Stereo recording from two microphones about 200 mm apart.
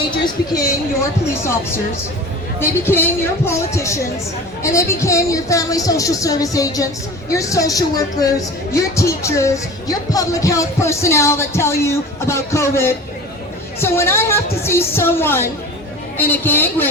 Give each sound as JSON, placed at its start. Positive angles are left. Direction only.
{"t": 2.6, "sound": "speech", "side_deg": 10}